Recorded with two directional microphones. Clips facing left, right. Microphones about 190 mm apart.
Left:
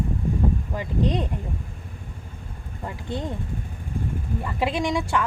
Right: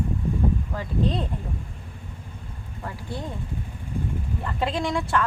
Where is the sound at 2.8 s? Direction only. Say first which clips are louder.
Left 3 dB; 20° left (ahead or behind).